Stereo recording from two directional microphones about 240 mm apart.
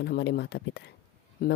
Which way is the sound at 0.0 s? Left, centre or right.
Left.